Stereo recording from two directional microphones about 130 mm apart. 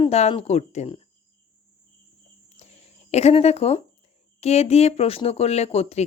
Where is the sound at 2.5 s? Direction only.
55° left (ahead or behind).